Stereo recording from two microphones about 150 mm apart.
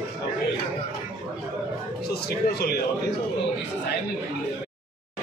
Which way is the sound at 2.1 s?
90° left.